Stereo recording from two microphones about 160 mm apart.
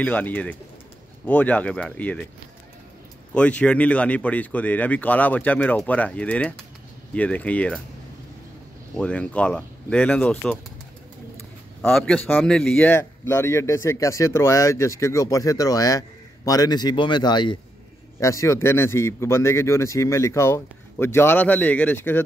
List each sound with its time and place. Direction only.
0.0 s a man's voice: 10° left (ahead or behind)
3.3 s a man's voice: 5° left (ahead or behind)
8.9 s a man's voice: 5° left (ahead or behind)
11.8 s a man's voice: 5° left (ahead or behind)